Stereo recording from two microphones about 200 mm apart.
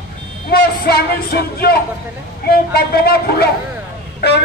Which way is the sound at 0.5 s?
50° left (ahead or behind).